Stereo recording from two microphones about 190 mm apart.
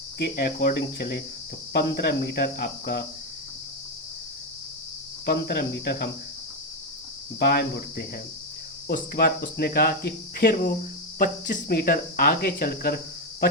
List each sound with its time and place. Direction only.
0.2 s cricket: 55° left (ahead or behind)
5.2 s cricket: 55° left (ahead or behind)
7.3 s cricket: 60° left (ahead or behind)
11.2 s speech: 50° left (ahead or behind)